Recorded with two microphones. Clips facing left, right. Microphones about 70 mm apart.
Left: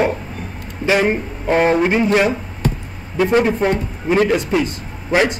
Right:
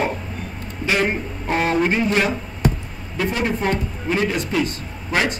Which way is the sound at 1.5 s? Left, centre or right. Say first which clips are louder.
Left 6 dB; left.